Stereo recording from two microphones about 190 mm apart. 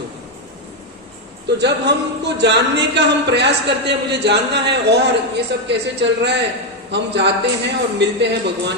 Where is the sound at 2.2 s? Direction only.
65° right (ahead or behind).